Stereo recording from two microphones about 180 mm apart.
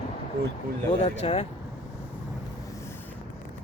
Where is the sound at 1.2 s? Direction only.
35° left (ahead or behind).